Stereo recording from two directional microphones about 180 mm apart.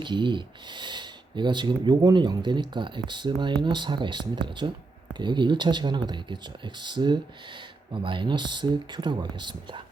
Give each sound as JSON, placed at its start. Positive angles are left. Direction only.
{"t": 0.0, "sound": "speech", "side_deg": -25}